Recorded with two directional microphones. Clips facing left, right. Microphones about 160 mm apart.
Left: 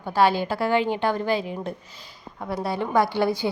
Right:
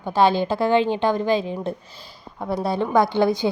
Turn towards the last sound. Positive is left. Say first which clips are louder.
# right 3 dB
turn(degrees=-20)  # may be behind; listen again after turning